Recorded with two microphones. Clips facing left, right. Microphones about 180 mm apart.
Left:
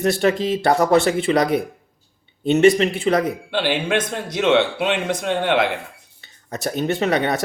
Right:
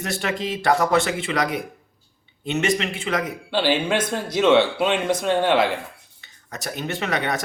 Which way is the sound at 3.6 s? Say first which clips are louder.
Even; 20° left (ahead or behind).